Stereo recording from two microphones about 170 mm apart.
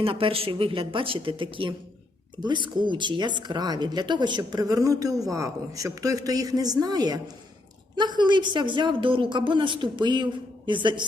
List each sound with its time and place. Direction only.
0.0 s a woman's voice: 30° right (ahead or behind)